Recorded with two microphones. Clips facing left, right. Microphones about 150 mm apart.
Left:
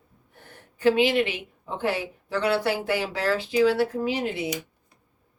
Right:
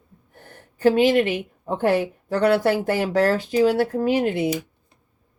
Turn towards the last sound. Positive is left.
turn(degrees=-55)  # may be behind; listen again after turning